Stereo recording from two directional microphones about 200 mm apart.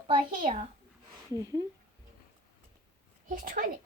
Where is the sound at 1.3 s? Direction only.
15° right (ahead or behind).